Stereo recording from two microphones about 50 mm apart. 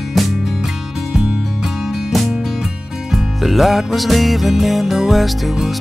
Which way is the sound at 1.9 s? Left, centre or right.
Centre.